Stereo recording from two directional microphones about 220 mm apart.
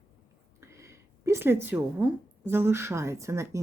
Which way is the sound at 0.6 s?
10° right (ahead or behind).